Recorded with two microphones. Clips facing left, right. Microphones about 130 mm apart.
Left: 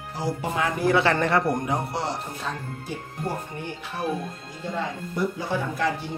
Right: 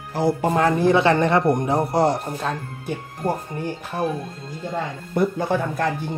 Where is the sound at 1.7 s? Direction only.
40° right (ahead or behind).